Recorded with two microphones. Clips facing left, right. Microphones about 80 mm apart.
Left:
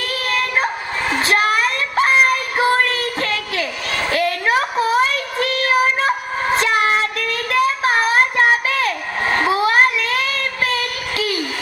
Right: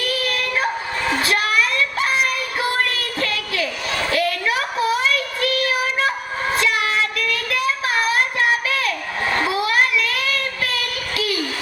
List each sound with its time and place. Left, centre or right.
0.0 s dog: left